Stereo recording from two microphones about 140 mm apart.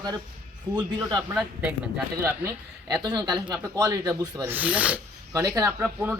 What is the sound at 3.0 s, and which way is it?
A man's voice, 30° right (ahead or behind).